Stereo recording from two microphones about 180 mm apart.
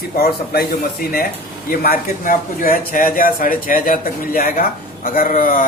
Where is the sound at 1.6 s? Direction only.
55° left (ahead or behind).